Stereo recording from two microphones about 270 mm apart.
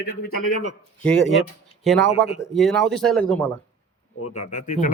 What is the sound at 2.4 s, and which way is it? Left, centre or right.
Speech, centre.